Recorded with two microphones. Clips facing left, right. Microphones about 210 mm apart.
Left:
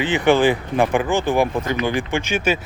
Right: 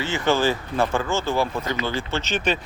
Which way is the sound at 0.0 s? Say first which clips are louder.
Left 6 dB; 15° left (ahead or behind).